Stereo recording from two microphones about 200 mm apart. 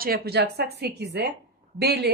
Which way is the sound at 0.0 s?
50° right (ahead or behind).